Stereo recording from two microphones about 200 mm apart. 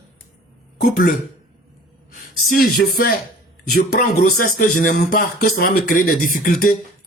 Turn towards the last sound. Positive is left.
turn(degrees=45)  # may be behind; listen again after turning